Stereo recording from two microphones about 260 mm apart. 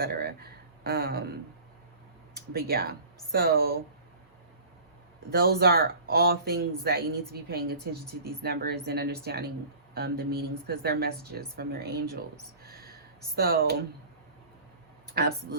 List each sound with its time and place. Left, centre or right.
0.0 s a sound: right
0.9 s speech: right
2.5 s speech: right
5.3 s speech: right
12.6 s a sound: right
13.3 s speech: right
15.2 s speech: right